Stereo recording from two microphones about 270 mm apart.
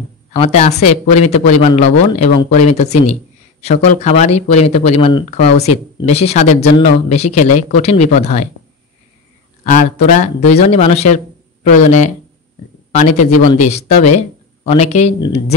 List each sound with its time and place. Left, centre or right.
0.3 s a man's voice: left
9.7 s a man's voice: left